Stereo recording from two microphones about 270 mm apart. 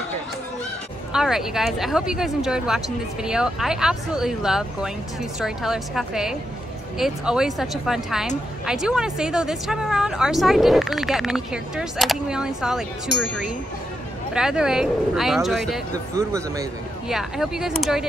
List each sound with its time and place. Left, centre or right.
1.1 s speech: centre
15.9 s speech: centre
17.1 s speech: centre